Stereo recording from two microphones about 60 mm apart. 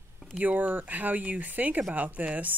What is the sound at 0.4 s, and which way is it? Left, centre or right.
Speech, right.